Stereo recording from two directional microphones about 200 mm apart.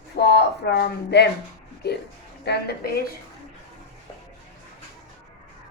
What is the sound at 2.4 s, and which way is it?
Speech, 55° left (ahead or behind).